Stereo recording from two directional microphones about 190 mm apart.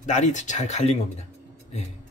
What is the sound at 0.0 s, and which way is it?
Speech, 40° left (ahead or behind).